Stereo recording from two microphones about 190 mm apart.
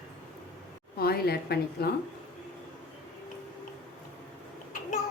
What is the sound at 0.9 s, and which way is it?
Speech, 55° left (ahead or behind).